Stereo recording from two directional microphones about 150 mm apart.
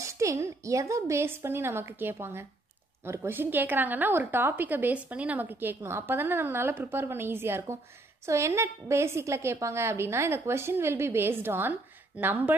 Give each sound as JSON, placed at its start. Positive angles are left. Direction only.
{"t": 0.0, "sound": "a woman's voice", "side_deg": -20}